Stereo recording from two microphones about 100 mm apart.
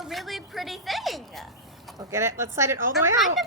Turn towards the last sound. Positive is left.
turn(degrees=-25)  # may be behind; listen again after turning